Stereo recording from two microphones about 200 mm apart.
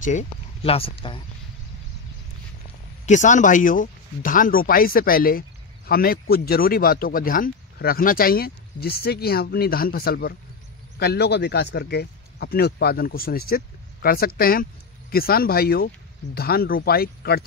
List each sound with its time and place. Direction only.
0.0 s speech: 35° left (ahead or behind)
3.1 s speech: 40° left (ahead or behind)